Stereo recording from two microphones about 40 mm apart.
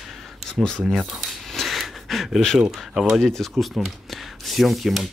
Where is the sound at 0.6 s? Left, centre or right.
Centre.